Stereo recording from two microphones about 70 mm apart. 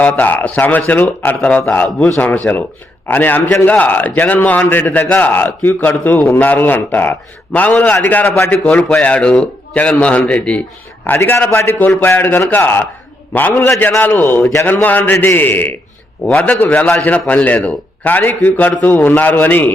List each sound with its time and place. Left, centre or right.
0.0 s a man's voice: left
8.6 s a man's voice: centre
8.9 s a man's voice: centre
16.7 s a man's voice: centre
17.0 s a man's voice: centre